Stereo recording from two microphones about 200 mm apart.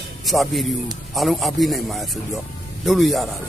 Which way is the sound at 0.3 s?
Centre (ahead or behind).